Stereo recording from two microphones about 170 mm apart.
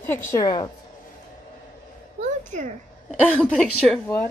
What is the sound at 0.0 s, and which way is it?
Speech, 15° left (ahead or behind).